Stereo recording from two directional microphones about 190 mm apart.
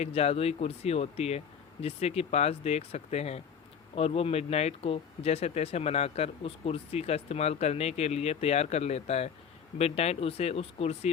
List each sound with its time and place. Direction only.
0.0 s speech: 35° left (ahead or behind)